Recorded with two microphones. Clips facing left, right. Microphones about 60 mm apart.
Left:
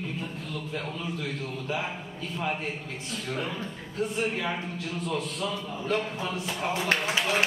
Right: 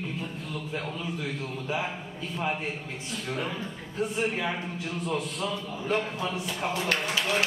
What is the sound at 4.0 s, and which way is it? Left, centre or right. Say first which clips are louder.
Speech: even; centre.